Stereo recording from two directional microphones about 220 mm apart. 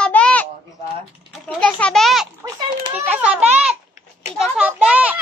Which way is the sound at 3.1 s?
5° right (ahead or behind).